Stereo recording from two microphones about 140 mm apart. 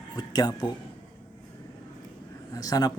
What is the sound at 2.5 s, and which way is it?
Speech, 25° left (ahead or behind).